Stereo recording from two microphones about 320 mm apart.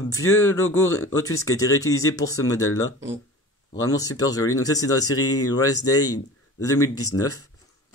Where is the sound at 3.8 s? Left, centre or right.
Centre.